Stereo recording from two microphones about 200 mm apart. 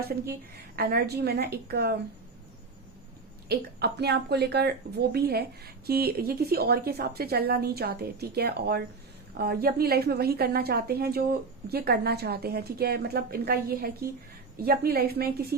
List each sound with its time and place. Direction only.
0.8 s speech: 50° right (ahead or behind)
3.5 s speech: 55° right (ahead or behind)